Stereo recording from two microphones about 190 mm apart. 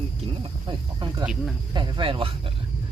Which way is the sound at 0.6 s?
25° right (ahead or behind).